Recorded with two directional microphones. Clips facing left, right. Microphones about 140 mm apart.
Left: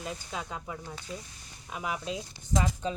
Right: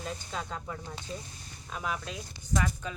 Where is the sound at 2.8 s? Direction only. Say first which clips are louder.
Left 6 dB; 25° left (ahead or behind).